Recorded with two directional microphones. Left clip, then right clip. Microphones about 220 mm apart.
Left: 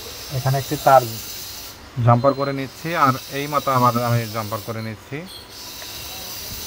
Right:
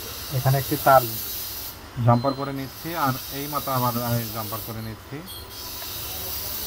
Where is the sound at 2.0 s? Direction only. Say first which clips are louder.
Left 5 dB; 45° left (ahead or behind).